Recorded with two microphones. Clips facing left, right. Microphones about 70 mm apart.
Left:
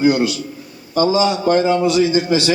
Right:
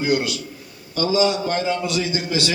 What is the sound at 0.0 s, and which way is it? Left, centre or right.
A man's voice, left.